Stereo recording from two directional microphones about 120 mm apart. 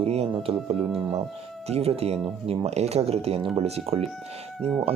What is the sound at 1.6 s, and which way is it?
Speech, 55° right (ahead or behind).